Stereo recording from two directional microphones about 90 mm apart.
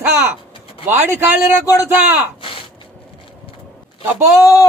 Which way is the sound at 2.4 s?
75° left (ahead or behind).